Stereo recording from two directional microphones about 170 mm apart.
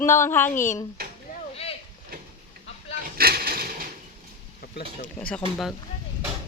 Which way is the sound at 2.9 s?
60° right (ahead or behind).